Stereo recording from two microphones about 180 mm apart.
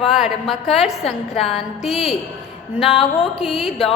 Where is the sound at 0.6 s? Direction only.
35° left (ahead or behind).